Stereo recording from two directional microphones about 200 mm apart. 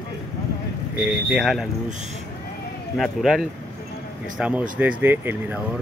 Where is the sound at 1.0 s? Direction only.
5° right (ahead or behind).